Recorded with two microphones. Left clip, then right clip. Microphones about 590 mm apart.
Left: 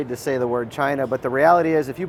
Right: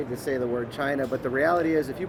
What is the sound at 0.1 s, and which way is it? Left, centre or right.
Speech, left.